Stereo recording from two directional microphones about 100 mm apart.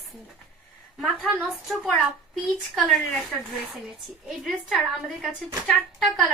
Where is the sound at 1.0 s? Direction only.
5° left (ahead or behind).